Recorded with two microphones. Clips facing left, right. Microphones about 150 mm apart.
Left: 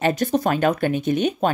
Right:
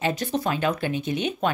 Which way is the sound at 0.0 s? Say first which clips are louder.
Left 5 dB; 45° left (ahead or behind).